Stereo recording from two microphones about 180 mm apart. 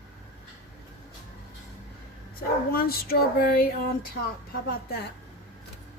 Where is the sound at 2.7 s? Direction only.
55° left (ahead or behind).